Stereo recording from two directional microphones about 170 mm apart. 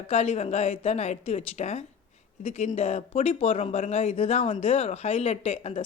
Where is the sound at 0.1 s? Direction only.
40° left (ahead or behind).